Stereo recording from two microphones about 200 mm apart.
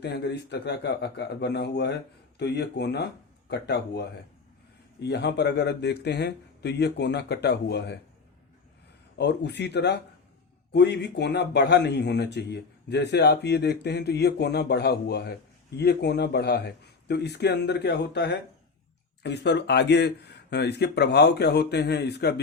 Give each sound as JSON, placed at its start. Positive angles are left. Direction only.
{"t": 0.0, "sound": "a man's voice", "side_deg": 55}
{"t": 9.1, "sound": "a man's voice", "side_deg": 60}